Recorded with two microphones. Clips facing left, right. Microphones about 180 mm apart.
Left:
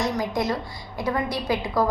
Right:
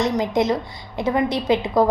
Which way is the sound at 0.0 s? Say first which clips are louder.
Right 5 dB; 20° right (ahead or behind).